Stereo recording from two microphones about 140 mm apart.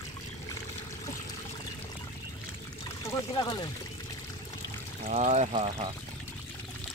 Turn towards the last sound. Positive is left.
turn(degrees=-45)  # may be behind; listen again after turning